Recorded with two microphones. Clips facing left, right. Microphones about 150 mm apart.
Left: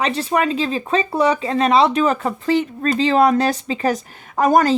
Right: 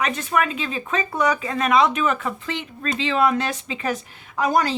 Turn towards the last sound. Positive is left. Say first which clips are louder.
# left 6 dB
turn(degrees=45)  # may be behind; listen again after turning